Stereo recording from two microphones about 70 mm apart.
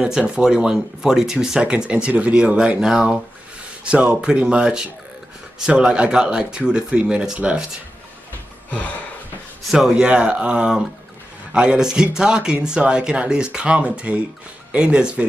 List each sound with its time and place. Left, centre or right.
0.0 s speech: centre
9.7 s speech: centre